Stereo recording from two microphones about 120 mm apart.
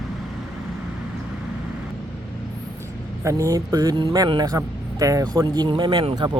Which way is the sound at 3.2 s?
25° right (ahead or behind).